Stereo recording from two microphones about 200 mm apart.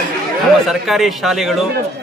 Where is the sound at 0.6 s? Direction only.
Centre (ahead or behind).